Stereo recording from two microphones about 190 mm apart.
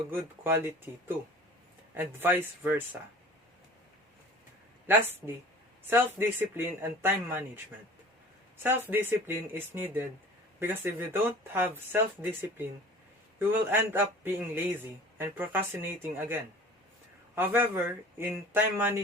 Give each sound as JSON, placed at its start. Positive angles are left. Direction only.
{"t": 0.1, "sound": "speech", "side_deg": -10}
{"t": 4.9, "sound": "speech", "side_deg": -10}
{"t": 13.7, "sound": "speech", "side_deg": -10}